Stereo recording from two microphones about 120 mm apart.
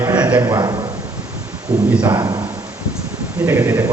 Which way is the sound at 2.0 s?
30° right (ahead or behind).